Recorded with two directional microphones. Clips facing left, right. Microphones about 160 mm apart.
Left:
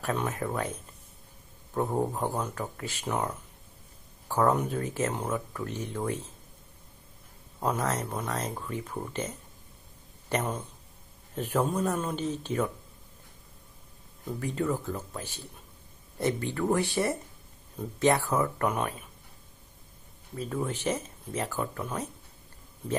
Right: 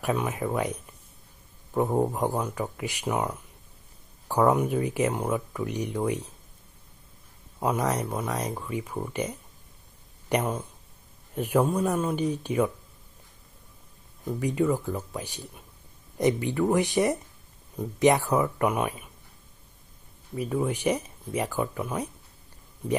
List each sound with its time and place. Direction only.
0.0 s speech: 10° right (ahead or behind)
7.6 s speech: 10° right (ahead or behind)
14.2 s speech: 10° right (ahead or behind)
20.3 s speech: 15° right (ahead or behind)